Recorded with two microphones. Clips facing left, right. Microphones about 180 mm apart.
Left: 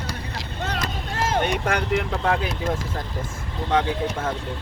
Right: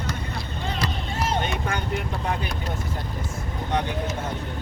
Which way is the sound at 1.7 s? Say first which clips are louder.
Left 5 dB; 90° left.